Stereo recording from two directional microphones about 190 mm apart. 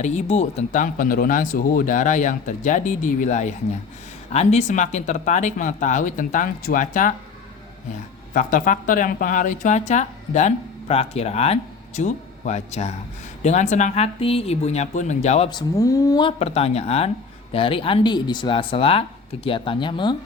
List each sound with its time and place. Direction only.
0.0 s a woman's voice: 35° left (ahead or behind)
8.3 s a woman's voice: 45° left (ahead or behind)
15.4 s speech: 20° left (ahead or behind)
16.4 s a woman's voice: 30° left (ahead or behind)